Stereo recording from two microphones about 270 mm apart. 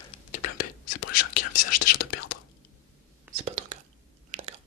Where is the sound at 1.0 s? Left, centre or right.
Left.